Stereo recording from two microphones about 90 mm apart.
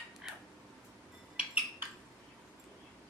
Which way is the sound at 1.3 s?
15° right (ahead or behind).